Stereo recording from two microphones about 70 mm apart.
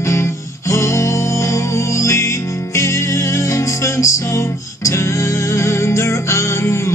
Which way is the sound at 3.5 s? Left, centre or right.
Left.